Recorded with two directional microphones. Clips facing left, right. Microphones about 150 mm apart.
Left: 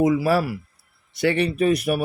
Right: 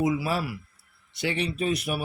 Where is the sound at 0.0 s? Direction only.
55° left (ahead or behind).